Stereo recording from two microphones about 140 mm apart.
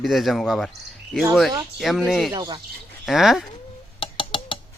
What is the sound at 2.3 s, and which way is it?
Speech, 30° right (ahead or behind).